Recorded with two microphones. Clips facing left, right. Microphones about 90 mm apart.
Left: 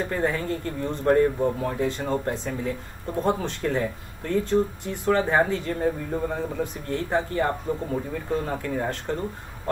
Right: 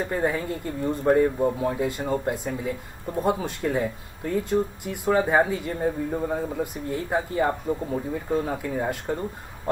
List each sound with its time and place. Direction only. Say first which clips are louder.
0.0 s speech: even; 15° right (ahead or behind)